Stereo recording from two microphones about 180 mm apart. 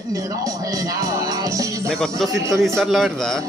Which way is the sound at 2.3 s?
15° right (ahead or behind).